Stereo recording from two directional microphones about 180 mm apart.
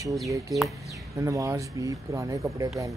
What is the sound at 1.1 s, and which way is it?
Speech, 15° right (ahead or behind).